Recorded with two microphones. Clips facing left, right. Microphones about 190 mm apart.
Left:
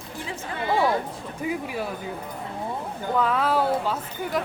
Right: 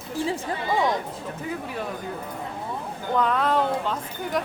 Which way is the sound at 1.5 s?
10° left (ahead or behind).